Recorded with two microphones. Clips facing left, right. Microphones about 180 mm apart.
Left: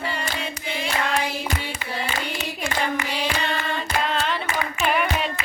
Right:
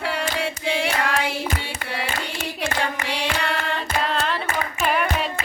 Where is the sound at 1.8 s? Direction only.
55° right (ahead or behind).